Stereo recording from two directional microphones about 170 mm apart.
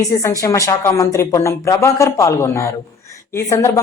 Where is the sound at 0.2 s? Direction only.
20° left (ahead or behind).